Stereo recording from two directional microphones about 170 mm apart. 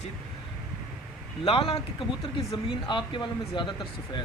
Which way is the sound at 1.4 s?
35° left (ahead or behind).